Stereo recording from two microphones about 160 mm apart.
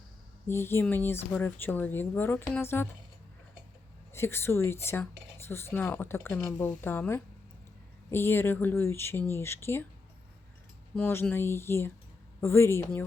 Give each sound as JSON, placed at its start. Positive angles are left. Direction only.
{"t": 0.4, "sound": "speech", "side_deg": 15}
{"t": 4.1, "sound": "speech", "side_deg": 15}
{"t": 10.9, "sound": "speech", "side_deg": 15}